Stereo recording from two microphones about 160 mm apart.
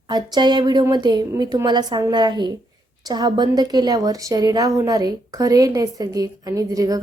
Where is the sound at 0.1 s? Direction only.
25° right (ahead or behind).